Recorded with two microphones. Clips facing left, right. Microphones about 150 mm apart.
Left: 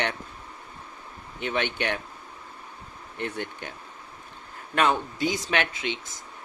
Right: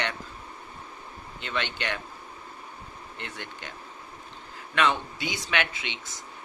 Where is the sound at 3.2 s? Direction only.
55° left (ahead or behind).